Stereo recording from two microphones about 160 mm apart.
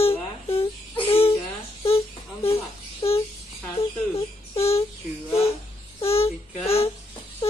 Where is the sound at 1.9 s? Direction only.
35° left (ahead or behind).